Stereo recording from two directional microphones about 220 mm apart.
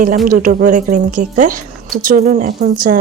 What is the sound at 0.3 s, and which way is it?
A woman's voice, 40° right (ahead or behind).